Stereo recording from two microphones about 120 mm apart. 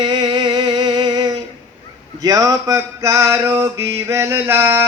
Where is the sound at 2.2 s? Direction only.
30° right (ahead or behind).